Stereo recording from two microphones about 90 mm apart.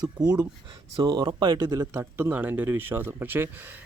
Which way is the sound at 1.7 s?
30° right (ahead or behind).